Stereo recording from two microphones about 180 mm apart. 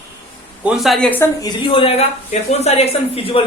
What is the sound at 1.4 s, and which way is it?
Speech, 25° left (ahead or behind).